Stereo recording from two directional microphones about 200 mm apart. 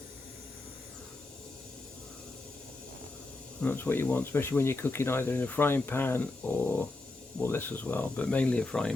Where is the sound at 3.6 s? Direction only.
10° left (ahead or behind).